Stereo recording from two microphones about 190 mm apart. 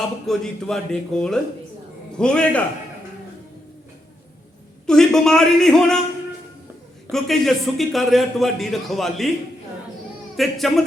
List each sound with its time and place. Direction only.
0.3 s speech: centre (ahead or behind)
4.9 s speech: 5° left (ahead or behind)
7.1 s speech: centre (ahead or behind)
10.3 s speech: centre (ahead or behind)